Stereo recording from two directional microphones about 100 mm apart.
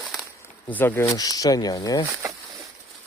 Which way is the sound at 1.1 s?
40° left (ahead or behind).